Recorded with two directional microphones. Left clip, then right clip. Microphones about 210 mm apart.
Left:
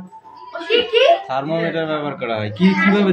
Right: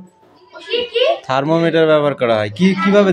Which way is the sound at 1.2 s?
45° right (ahead or behind).